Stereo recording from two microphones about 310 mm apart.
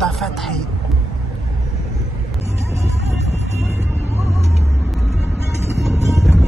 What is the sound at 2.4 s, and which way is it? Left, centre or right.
Music, centre.